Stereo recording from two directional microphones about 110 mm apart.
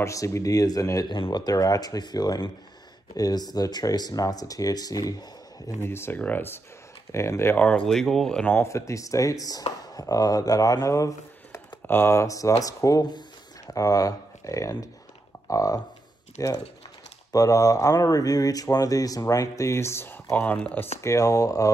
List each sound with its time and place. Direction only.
0.0 s speech: 30° left (ahead or behind)
5.8 s speech: 20° left (ahead or behind)
7.5 s speech: 10° left (ahead or behind)
8.5 s speech: 30° left (ahead or behind); by 20.8 s 15° left (ahead or behind)
21.0 s speech: 30° left (ahead or behind)